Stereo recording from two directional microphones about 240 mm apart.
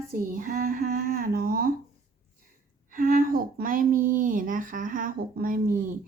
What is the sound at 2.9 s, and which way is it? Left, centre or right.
Speech, right.